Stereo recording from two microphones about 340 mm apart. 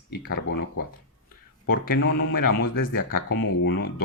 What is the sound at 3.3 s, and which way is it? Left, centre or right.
Speech, left.